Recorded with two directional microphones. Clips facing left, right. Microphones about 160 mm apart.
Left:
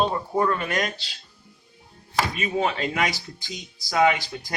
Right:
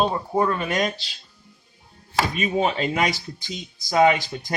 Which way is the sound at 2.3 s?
20° right (ahead or behind).